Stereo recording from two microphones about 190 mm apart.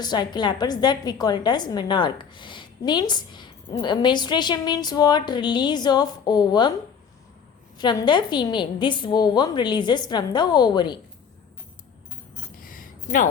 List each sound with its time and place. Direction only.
0.0 s a woman's voice: 20° left (ahead or behind)
7.8 s a woman's voice: 25° left (ahead or behind)
12.7 s a sound: 45° left (ahead or behind)